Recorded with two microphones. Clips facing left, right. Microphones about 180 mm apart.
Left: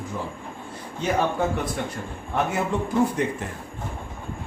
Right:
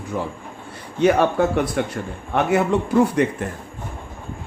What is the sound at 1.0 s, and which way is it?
Speech, 70° right (ahead or behind).